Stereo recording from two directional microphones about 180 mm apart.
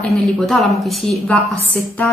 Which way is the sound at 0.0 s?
Centre (ahead or behind).